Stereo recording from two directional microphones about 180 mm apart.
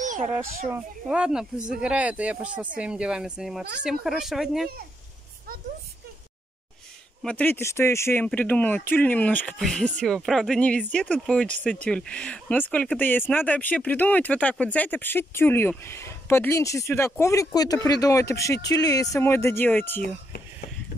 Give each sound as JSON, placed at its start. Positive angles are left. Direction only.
{"t": 0.0, "sound": "a sound", "side_deg": -45}
{"t": 0.7, "sound": "speech", "side_deg": -10}
{"t": 7.2, "sound": "speech", "side_deg": 10}